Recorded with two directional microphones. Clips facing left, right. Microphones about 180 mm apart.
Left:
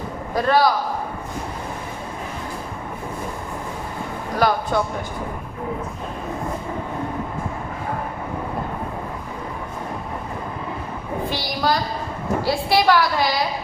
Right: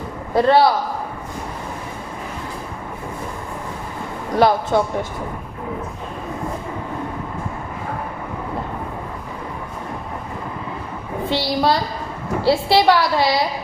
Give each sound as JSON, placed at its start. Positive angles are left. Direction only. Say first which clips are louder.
{"t": 0.3, "sound": "a woman's voice", "louder": "right 4 dB", "side_deg": -25}
{"t": 4.4, "sound": "a woman's voice", "louder": "right 4 dB", "side_deg": -25}
{"t": 11.3, "sound": "a woman's voice", "louder": "right 5 dB", "side_deg": -25}